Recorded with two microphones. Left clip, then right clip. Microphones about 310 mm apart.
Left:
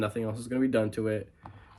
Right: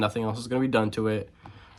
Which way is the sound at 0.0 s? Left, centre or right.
Centre.